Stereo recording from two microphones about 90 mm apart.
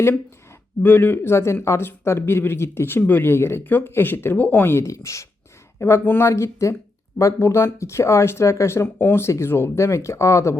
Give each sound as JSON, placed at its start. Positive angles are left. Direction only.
{"t": 0.8, "sound": "speech", "side_deg": 20}